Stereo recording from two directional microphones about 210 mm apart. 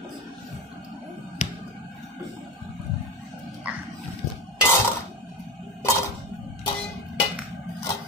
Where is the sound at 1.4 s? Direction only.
35° left (ahead or behind).